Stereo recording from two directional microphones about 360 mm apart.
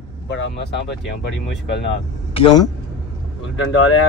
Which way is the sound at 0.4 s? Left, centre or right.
Left.